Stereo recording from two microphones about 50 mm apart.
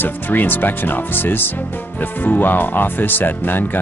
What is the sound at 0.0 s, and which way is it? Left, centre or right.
Speech, left.